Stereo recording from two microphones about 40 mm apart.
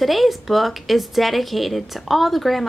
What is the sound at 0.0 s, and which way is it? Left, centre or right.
Speech, centre.